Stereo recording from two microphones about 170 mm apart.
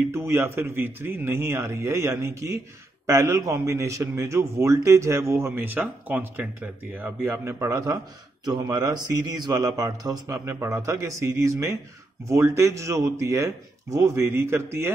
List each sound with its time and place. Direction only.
0.1 s speech: 15° right (ahead or behind)